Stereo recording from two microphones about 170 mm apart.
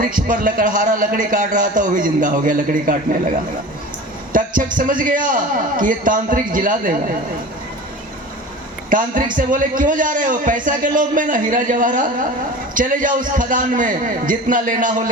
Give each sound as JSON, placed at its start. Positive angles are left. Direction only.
{"t": 0.0, "sound": "a woman's voice", "side_deg": -55}
{"t": 4.3, "sound": "a woman's voice", "side_deg": -55}
{"t": 8.9, "sound": "a woman's voice", "side_deg": -55}